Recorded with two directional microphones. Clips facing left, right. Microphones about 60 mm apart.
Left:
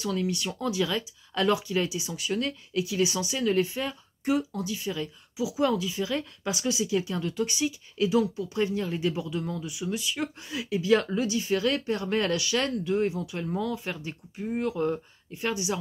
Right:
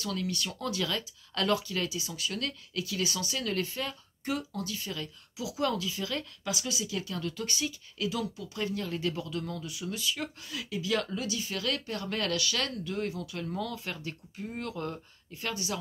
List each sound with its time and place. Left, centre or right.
0.0 s speech: centre